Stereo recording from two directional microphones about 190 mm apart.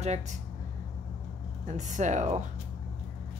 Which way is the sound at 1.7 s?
40° right (ahead or behind).